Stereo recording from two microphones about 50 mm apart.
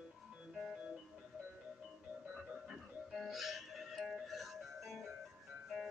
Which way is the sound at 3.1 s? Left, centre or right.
Centre.